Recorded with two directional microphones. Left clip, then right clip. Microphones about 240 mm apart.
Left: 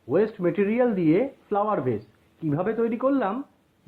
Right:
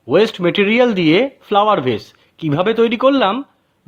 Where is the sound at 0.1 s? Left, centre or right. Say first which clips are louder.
Right 9 dB; right.